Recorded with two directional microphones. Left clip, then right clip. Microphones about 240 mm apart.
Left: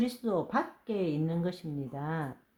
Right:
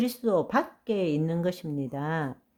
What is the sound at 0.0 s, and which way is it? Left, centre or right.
Speech, right.